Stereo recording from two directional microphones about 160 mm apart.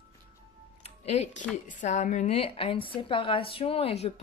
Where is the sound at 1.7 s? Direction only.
50° left (ahead or behind).